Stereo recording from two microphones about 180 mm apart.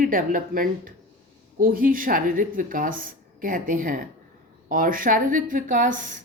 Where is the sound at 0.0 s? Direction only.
50° right (ahead or behind).